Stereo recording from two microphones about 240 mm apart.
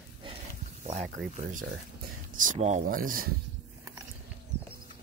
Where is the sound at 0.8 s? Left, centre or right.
Right.